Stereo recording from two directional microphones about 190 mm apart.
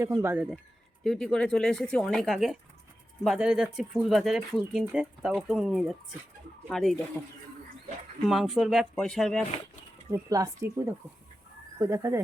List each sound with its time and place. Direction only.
0.0 s speech: 10° right (ahead or behind)
1.0 s speech: centre (ahead or behind)
7.2 s speech: 15° left (ahead or behind)
8.3 s speech: centre (ahead or behind)
10.1 s speech: 15° right (ahead or behind)